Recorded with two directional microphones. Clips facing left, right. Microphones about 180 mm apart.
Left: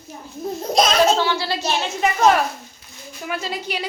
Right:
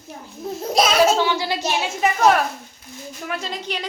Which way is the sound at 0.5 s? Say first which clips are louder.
Even; 5° right (ahead or behind).